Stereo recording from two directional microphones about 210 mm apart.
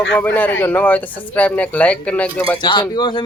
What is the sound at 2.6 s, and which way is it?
Speech, 20° left (ahead or behind).